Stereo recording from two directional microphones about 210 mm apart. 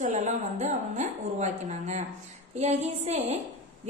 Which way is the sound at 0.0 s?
35° right (ahead or behind).